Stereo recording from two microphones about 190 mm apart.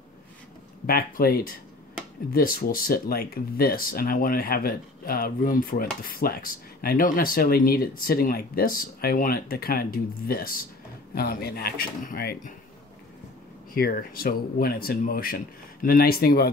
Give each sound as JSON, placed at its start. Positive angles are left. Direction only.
{"t": 0.8, "sound": "speech", "side_deg": 50}
{"t": 13.7, "sound": "speech", "side_deg": 50}